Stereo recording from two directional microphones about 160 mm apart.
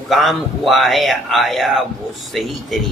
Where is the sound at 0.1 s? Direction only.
Centre (ahead or behind).